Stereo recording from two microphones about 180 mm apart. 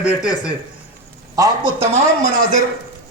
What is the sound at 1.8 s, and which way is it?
Speech, 40° right (ahead or behind).